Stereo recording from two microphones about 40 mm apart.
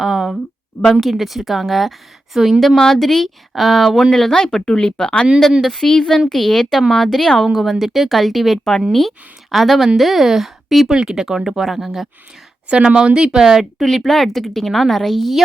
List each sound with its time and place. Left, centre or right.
0.0 s a sound: centre
0.9 s a woman's voice: centre
2.6 s a woman's voice: centre
4.1 s a woman's voice: centre
4.6 s speech: left
5.8 s a woman's voice: centre
10.9 s speech: centre
12.9 s speech: right
13.4 s speech: centre
13.8 s a woman's voice: centre